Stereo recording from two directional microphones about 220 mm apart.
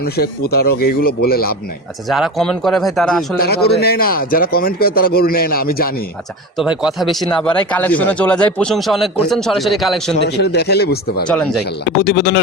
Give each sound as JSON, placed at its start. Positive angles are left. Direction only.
{"t": 0.0, "sound": "a man's voice", "side_deg": 45}
{"t": 2.0, "sound": "speech", "side_deg": 0}
{"t": 3.3, "sound": "a man's voice", "side_deg": 45}
{"t": 6.6, "sound": "speech", "side_deg": 0}
{"t": 10.2, "sound": "a man's voice", "side_deg": 50}
{"t": 11.3, "sound": "speech", "side_deg": 5}
{"t": 12.0, "sound": "a man's voice", "side_deg": 50}